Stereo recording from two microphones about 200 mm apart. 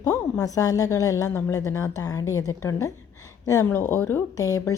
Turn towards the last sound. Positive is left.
turn(degrees=15)  # may be behind; listen again after turning